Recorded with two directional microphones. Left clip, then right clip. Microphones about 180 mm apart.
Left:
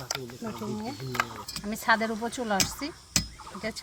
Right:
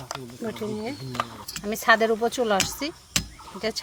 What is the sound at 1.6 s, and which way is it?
Speech, 40° right (ahead or behind).